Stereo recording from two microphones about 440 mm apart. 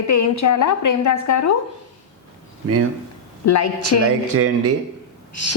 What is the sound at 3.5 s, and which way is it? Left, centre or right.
Speech, left.